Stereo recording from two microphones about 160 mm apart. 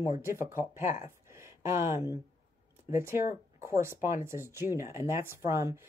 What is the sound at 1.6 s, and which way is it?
Speech, 15° right (ahead or behind).